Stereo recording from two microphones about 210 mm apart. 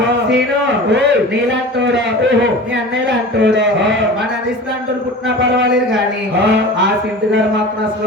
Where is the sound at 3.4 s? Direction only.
60° right (ahead or behind).